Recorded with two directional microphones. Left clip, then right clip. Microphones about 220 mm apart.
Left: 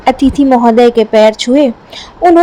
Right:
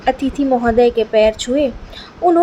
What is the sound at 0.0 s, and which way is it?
A woman's voice, 30° left (ahead or behind).